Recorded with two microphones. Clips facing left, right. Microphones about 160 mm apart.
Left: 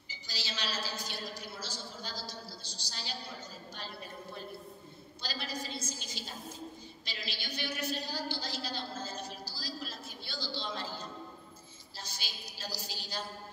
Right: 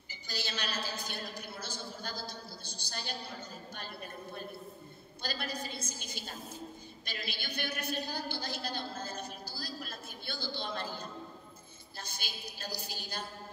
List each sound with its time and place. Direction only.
0.1 s a woman's voice: 55° right (ahead or behind)
5.2 s a woman's voice: 55° right (ahead or behind)
12.0 s a woman's voice: 55° right (ahead or behind)